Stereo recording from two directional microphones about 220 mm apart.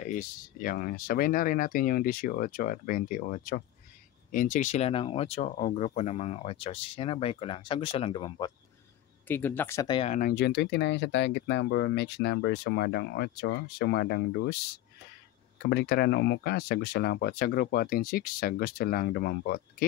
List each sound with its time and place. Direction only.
0.0 s speech: 40° left (ahead or behind)
9.3 s speech: 10° left (ahead or behind)
10.1 s speech: 45° left (ahead or behind)
15.6 s speech: 45° left (ahead or behind)